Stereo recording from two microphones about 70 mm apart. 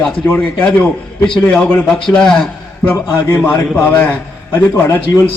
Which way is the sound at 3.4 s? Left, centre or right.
Centre.